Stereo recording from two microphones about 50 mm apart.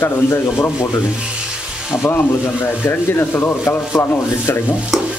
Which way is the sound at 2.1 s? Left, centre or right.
Left.